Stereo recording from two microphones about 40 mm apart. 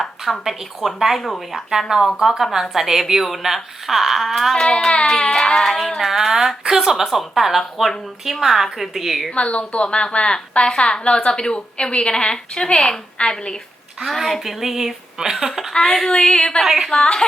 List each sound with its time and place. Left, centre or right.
0.0 s speech: centre
4.5 s a woman's voice: centre
5.0 s a sound: centre
5.6 s speech: centre
9.3 s a woman's voice: left
14.0 s speech: centre
15.7 s a sound: centre
16.0 s a woman's voice: left
16.6 s speech: centre
16.9 s a woman's voice: centre